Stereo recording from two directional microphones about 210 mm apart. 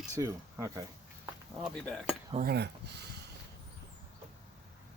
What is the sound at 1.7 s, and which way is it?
Speech, centre (ahead or behind).